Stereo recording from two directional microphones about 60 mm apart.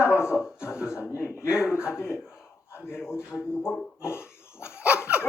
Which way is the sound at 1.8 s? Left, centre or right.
Left.